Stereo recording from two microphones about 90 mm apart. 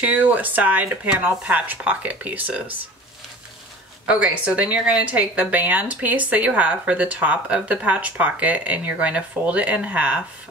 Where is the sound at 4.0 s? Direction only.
15° right (ahead or behind).